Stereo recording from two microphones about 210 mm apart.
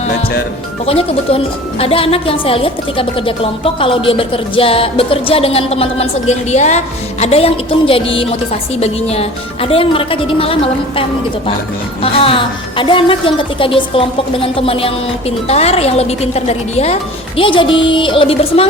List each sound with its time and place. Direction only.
0.9 s a woman's voice: 25° left (ahead or behind)
12.0 s a woman's voice: 25° left (ahead or behind)